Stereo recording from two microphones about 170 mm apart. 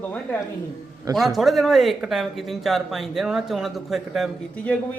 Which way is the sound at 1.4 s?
Centre (ahead or behind).